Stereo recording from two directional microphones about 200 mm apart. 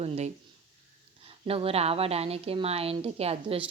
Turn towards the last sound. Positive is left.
turn(degrees=-30)  # may be behind; listen again after turning